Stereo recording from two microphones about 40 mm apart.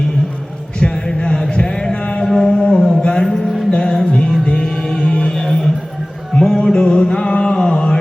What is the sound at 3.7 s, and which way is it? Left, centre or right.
Music, centre.